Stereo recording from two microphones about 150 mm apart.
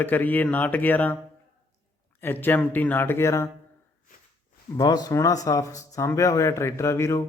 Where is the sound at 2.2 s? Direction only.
15° left (ahead or behind).